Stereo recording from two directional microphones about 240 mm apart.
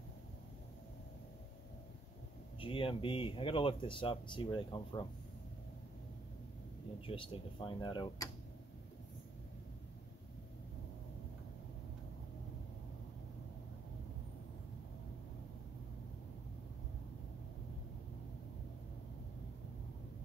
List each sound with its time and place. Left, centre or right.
2.6 s speech: left
7.1 s speech: left